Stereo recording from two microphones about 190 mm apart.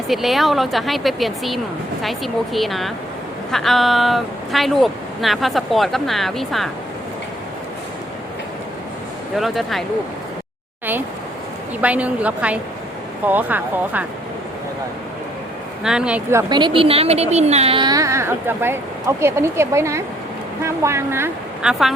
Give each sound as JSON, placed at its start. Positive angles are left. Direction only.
{"t": 0.1, "sound": "speech", "side_deg": 0}
{"t": 9.3, "sound": "speech", "side_deg": 0}
{"t": 11.8, "sound": "speech", "side_deg": -5}
{"t": 15.8, "sound": "speech", "side_deg": -5}